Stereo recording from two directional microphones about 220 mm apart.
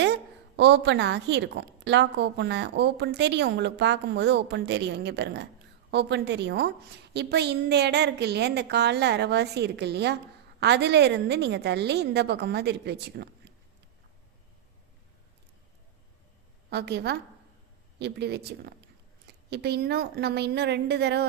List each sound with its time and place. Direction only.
0.0 s a woman's voice: 50° right (ahead or behind)
16.6 s a woman's voice: 50° right (ahead or behind)